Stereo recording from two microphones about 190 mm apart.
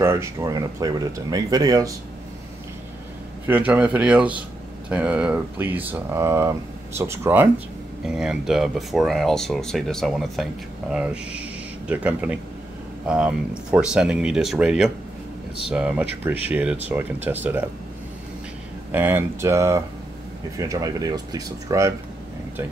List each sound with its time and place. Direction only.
0.0 s speech: 15° right (ahead or behind)
3.4 s speech: 10° right (ahead or behind)
18.9 s speech: 10° right (ahead or behind)